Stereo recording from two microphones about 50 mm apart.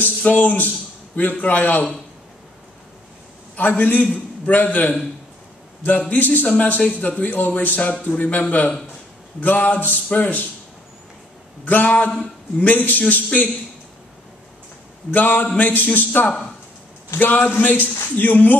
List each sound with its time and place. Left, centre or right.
0.2 s a man's voice: left
3.5 s a man's voice: left
11.6 s speech: left
15.0 s speech: left